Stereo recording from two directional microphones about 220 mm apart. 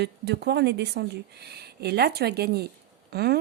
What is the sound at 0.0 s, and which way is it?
Speech, 50° right (ahead or behind).